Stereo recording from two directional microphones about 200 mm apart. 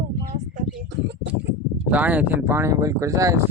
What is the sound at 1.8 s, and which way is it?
Speech, 10° right (ahead or behind).